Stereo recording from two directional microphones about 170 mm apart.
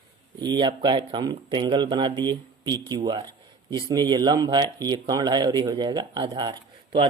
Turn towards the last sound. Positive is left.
turn(degrees=-25)  # may be behind; listen again after turning